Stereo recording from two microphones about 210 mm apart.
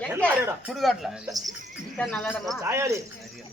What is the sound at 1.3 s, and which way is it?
Speech, 15° right (ahead or behind).